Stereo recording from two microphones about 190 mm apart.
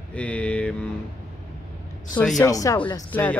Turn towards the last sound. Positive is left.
turn(degrees=10)  # may be behind; listen again after turning